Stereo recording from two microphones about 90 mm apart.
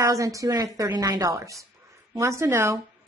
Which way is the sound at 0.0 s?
40° right (ahead or behind).